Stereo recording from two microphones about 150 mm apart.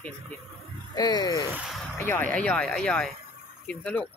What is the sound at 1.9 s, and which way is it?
Speech, 15° left (ahead or behind).